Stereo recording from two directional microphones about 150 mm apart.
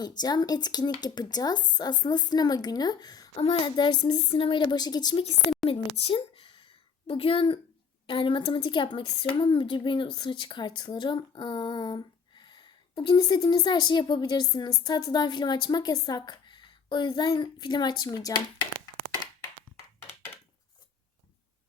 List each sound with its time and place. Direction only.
0.2 s a woman's voice: 25° left (ahead or behind)
3.3 s a woman's voice: 40° left (ahead or behind)
20.0 s a sound: 15° left (ahead or behind)